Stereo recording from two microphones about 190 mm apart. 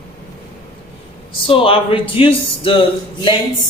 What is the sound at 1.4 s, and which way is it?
Speech, 30° left (ahead or behind).